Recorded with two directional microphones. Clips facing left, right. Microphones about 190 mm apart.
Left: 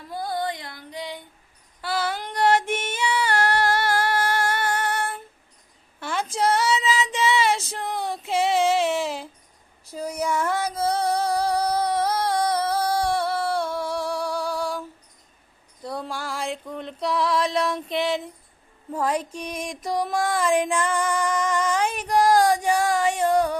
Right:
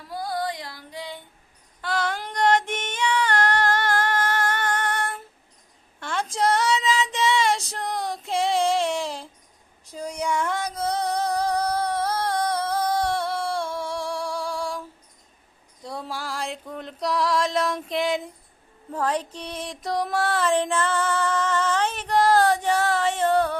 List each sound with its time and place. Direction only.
0.1 s music: 25° left (ahead or behind)
1.8 s female singing: 5° left (ahead or behind)
9.9 s a sound: 5° left (ahead or behind)
15.8 s music: centre (ahead or behind)
20.1 s female singing: 10° left (ahead or behind)